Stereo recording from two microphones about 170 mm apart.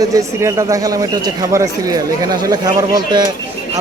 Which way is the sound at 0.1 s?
15° right (ahead or behind).